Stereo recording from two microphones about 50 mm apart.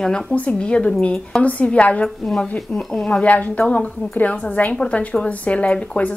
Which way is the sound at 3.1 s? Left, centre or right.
Left.